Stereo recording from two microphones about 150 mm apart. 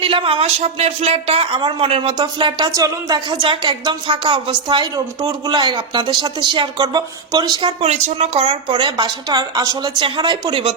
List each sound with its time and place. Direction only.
0.0 s a man's voice: 35° right (ahead or behind)
7.9 s a man's voice: 50° right (ahead or behind)